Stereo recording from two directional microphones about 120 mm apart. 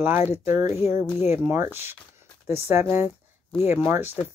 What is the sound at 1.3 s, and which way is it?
Speech, 20° right (ahead or behind).